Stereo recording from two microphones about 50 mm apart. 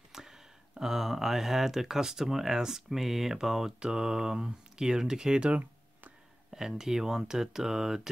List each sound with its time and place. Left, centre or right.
0.1 s speech: centre
5.6 s a sound: right
6.8 s speech: centre